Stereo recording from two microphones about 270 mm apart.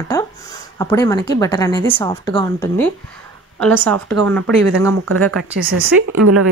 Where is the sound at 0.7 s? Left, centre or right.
Centre.